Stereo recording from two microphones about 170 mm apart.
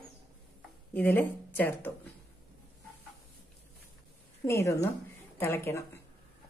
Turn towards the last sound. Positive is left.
turn(degrees=15)  # may be behind; listen again after turning